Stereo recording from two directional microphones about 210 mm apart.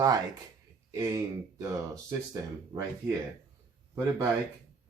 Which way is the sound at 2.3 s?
15° right (ahead or behind).